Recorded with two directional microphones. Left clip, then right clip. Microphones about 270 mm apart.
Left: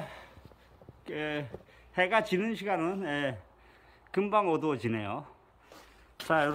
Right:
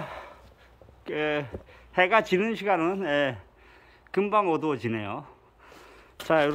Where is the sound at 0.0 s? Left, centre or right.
Centre.